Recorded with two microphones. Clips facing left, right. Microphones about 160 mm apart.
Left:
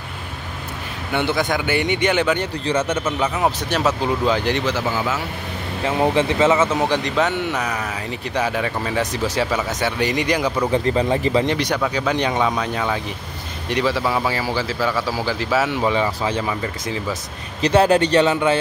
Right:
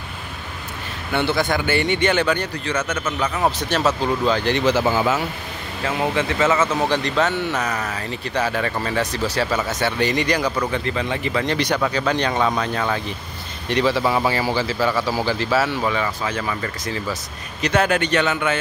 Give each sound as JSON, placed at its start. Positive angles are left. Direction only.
{"t": 1.1, "sound": "speech", "side_deg": 15}
{"t": 2.5, "sound": "speech", "side_deg": 30}
{"t": 4.0, "sound": "speech", "side_deg": 15}
{"t": 5.9, "sound": "speech", "side_deg": 30}
{"t": 6.5, "sound": "speech", "side_deg": 15}
{"t": 10.7, "sound": "speech", "side_deg": 35}
{"t": 11.5, "sound": "speech", "side_deg": 5}
{"t": 15.5, "sound": "speech", "side_deg": 15}
{"t": 16.6, "sound": "speech", "side_deg": 20}
{"t": 17.6, "sound": "speech", "side_deg": 30}